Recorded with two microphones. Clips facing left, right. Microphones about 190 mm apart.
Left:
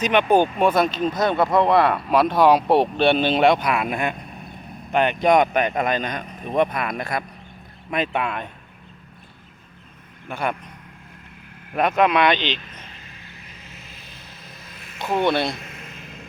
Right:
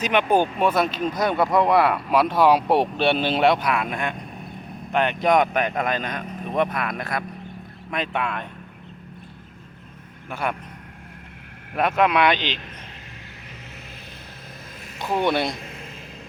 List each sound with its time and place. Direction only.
0.0 s speech: 5° right (ahead or behind)
10.2 s speech: 5° right (ahead or behind)
11.7 s speech: 5° right (ahead or behind)
15.2 s speech: 15° right (ahead or behind)
15.6 s a sound: 30° right (ahead or behind)